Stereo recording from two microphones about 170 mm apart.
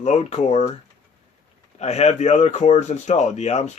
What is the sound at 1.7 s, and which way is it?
Speech, 40° left (ahead or behind).